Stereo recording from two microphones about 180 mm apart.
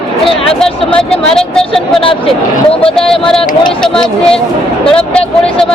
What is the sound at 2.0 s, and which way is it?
Speech, 30° left (ahead or behind).